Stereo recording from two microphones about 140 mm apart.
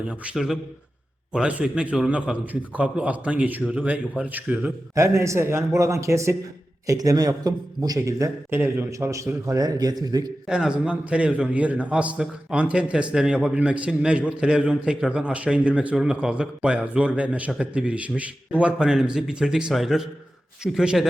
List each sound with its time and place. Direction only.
0.0 s a man's voice: 5° right (ahead or behind); by 10.3 s 30° right (ahead or behind)
10.5 s a man's voice: 5° right (ahead or behind)